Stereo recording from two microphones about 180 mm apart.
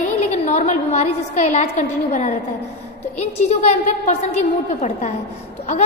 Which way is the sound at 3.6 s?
40° left (ahead or behind).